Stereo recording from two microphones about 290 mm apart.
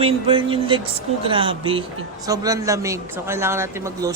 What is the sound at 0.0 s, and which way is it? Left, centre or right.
Speech, centre.